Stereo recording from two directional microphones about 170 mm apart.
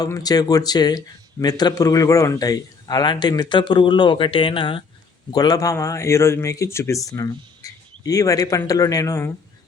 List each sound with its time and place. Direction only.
0.0 s speech: 20° left (ahead or behind)